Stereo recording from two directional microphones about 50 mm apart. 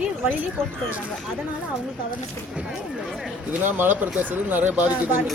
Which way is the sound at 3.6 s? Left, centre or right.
Right.